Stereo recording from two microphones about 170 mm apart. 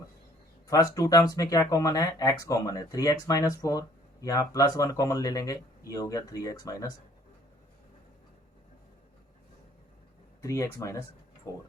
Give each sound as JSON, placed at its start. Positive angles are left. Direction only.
{"t": 0.7, "sound": "speech", "side_deg": 20}
{"t": 10.4, "sound": "speech", "side_deg": 20}